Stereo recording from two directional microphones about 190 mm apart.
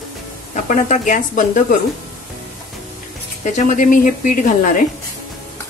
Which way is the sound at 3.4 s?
40° left (ahead or behind).